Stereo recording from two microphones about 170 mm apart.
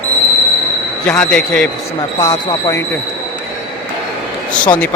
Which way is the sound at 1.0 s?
5° left (ahead or behind).